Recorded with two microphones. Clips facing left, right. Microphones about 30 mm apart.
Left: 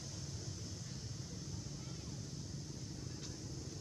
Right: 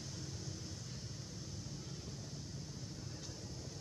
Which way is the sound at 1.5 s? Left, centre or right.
Centre.